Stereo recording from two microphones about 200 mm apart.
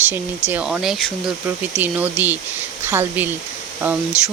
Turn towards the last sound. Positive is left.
turn(degrees=-10)  # may be behind; listen again after turning